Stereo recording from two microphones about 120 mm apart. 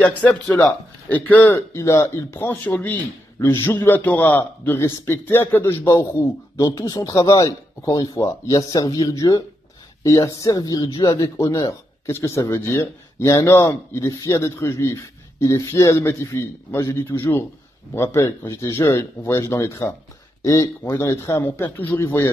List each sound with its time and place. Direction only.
0.0 s a man's voice: 15° left (ahead or behind)